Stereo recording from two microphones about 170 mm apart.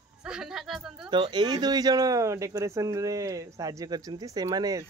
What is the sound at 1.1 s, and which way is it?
Speech, 25° right (ahead or behind).